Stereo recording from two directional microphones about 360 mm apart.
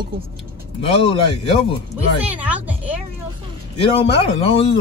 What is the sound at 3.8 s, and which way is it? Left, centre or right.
Speech, centre.